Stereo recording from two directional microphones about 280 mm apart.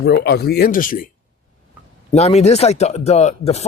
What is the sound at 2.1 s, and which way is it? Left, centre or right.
Speech, left.